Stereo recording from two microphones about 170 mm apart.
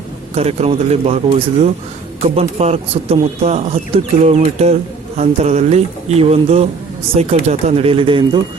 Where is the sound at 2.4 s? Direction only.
40° right (ahead or behind).